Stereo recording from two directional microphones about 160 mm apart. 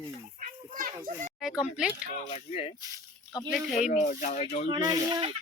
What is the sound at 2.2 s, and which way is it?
Speech, 40° left (ahead or behind).